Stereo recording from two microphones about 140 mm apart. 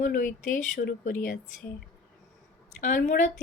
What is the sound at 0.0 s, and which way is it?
Speech, 70° left (ahead or behind).